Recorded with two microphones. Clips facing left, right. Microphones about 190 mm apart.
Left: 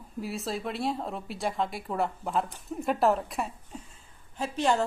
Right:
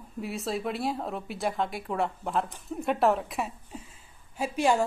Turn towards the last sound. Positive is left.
turn(degrees=-10)  # may be behind; listen again after turning